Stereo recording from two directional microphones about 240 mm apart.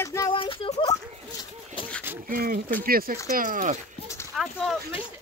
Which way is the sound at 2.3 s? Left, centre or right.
Right.